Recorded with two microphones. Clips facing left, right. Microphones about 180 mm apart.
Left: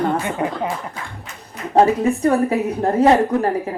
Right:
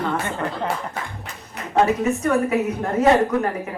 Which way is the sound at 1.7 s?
35° left (ahead or behind).